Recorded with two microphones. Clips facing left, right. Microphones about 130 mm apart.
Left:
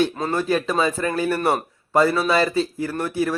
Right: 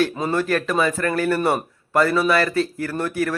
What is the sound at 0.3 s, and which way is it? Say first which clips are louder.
A man's voice: even; 15° left (ahead or behind).